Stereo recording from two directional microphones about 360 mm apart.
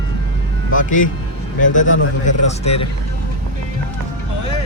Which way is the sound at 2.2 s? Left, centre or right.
Centre.